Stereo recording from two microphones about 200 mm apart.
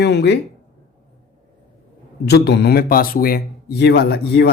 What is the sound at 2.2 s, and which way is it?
Speech, 55° left (ahead or behind).